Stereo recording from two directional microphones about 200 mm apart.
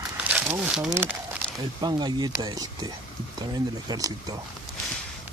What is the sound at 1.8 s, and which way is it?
Speech, 20° right (ahead or behind).